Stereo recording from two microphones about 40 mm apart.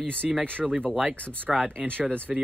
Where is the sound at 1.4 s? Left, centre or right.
Right.